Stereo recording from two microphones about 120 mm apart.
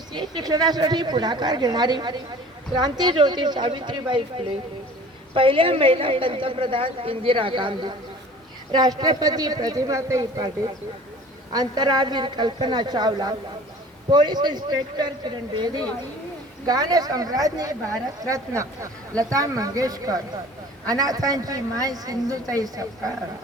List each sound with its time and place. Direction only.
0.1 s a woman's voice: 35° right (ahead or behind)
11.5 s a woman's voice: 35° right (ahead or behind)